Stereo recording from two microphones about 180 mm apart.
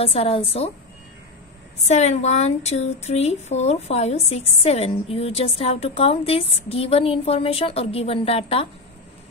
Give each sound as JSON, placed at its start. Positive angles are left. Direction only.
{"t": 0.0, "sound": "speech", "side_deg": 30}
{"t": 1.9, "sound": "speech", "side_deg": 40}